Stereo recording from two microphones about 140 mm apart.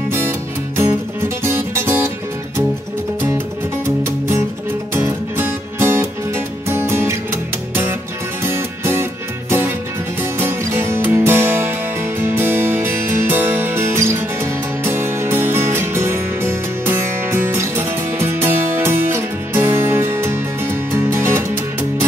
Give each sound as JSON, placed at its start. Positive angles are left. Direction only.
{"t": 1.4, "sound": "music", "side_deg": -20}
{"t": 3.8, "sound": "music", "side_deg": -20}
{"t": 8.5, "sound": "music", "side_deg": -15}